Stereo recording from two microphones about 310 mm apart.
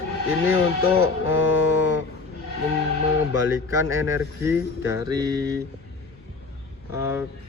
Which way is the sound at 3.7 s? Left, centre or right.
Centre.